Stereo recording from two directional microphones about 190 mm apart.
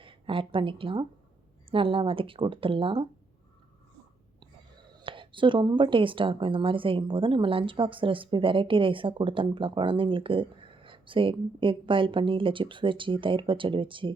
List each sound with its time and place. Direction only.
0.0 s a woman's voice: 25° right (ahead or behind)
4.9 s speech: 25° right (ahead or behind)